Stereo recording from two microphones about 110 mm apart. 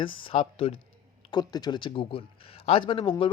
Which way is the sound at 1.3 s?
40° left (ahead or behind).